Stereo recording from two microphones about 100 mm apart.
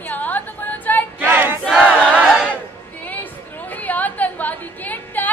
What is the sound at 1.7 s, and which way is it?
Battle cry, 15° right (ahead or behind).